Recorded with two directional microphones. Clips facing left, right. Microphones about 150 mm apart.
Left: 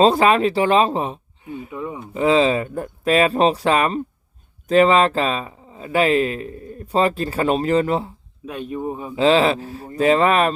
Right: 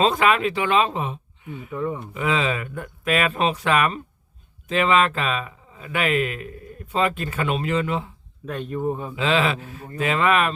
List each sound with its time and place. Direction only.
0.0 s speech: 35° left (ahead or behind)
1.7 s speech: 10° left (ahead or behind)
2.1 s speech: 30° left (ahead or behind)
8.4 s speech: 10° left (ahead or behind)
9.1 s speech: 35° left (ahead or behind)